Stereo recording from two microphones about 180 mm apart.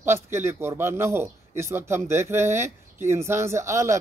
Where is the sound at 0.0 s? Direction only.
15° right (ahead or behind).